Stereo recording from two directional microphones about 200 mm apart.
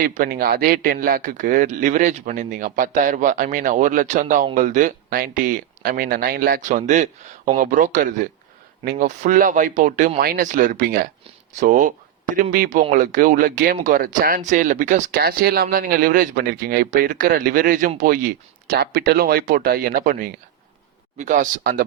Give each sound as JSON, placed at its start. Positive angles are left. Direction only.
{"t": 0.0, "sound": "speech", "side_deg": -45}